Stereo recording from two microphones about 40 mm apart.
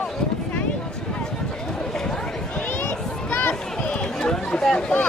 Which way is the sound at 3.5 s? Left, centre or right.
Left.